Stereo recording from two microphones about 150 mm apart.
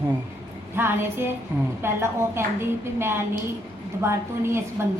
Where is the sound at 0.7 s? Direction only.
15° right (ahead or behind).